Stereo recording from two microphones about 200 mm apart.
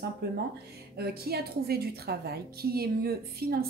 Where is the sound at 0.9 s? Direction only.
50° right (ahead or behind).